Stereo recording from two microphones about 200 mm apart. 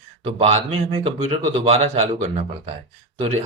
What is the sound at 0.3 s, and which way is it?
Speech, 30° right (ahead or behind).